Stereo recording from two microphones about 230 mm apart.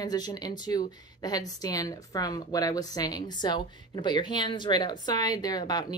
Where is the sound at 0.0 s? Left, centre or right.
Centre.